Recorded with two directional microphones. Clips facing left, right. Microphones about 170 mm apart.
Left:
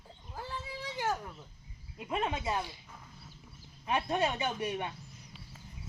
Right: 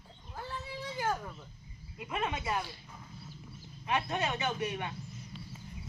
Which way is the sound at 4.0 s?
35° left (ahead or behind).